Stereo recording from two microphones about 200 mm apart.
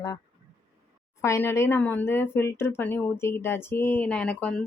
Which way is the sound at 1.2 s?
15° left (ahead or behind).